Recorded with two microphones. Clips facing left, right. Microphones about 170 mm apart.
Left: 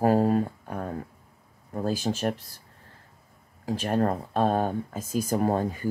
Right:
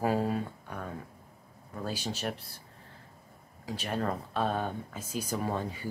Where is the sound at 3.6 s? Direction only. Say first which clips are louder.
Left 7 dB; 45° left (ahead or behind).